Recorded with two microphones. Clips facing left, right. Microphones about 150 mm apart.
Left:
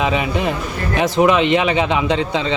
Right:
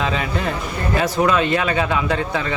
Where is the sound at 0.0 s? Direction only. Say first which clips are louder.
Left 4 dB; 15° left (ahead or behind).